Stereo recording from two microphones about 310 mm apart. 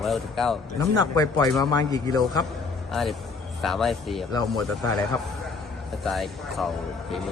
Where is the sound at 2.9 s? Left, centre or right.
Centre.